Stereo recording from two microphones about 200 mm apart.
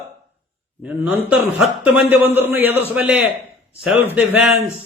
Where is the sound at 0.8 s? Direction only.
5° right (ahead or behind).